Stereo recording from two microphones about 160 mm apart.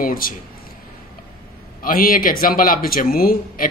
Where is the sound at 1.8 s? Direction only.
65° left (ahead or behind).